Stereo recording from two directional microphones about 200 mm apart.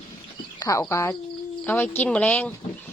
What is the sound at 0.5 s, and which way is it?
A woman's voice, 15° left (ahead or behind).